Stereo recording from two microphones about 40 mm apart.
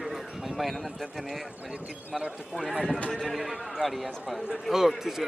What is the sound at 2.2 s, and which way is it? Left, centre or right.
Speech, centre.